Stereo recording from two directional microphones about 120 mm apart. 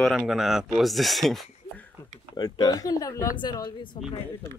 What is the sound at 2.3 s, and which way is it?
Speech, 35° left (ahead or behind).